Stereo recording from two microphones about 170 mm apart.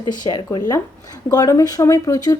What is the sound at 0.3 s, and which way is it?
Speech, 25° left (ahead or behind).